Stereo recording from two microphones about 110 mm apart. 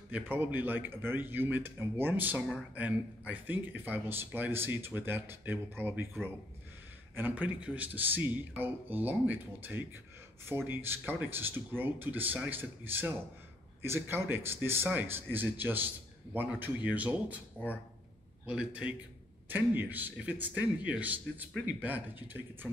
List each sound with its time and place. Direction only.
0.1 s speech: 15° right (ahead or behind)
18.4 s speech: 10° right (ahead or behind)